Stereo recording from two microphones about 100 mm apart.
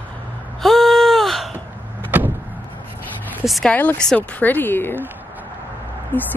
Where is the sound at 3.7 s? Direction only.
15° left (ahead or behind).